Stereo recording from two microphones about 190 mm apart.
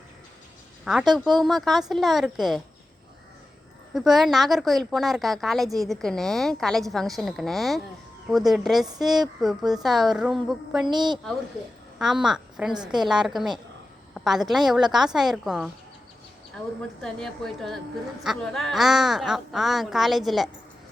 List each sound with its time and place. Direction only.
0.9 s a woman's voice: centre (ahead or behind)
3.9 s a woman's voice: centre (ahead or behind)
10.8 s a woman's voice: 25° right (ahead or behind)
11.9 s a woman's voice: 5° right (ahead or behind)
17.0 s a woman's voice: 5° left (ahead or behind)